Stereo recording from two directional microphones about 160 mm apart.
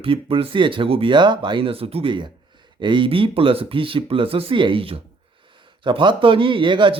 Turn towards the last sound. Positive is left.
turn(degrees=-30)  # may be behind; listen again after turning